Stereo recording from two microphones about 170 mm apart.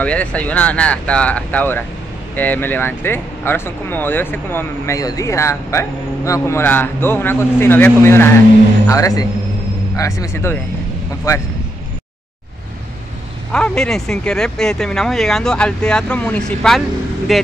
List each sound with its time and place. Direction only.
0.0 s speech: 5° left (ahead or behind)
13.5 s speech: 5° left (ahead or behind)